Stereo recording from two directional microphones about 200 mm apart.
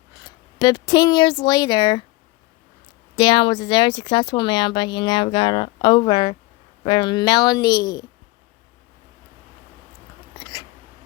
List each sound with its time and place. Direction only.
0.3 s speech: 20° left (ahead or behind)
3.2 s speech: 25° left (ahead or behind)